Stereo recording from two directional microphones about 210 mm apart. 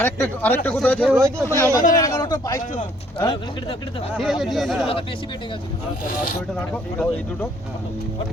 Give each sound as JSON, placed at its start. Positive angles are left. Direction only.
{"t": 0.0, "sound": "speech", "side_deg": 10}
{"t": 1.1, "sound": "speech", "side_deg": -15}
{"t": 1.5, "sound": "speech", "side_deg": 15}
{"t": 4.2, "sound": "speech", "side_deg": 0}